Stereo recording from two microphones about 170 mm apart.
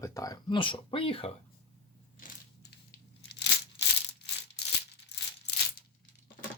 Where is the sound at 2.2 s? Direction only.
55° left (ahead or behind).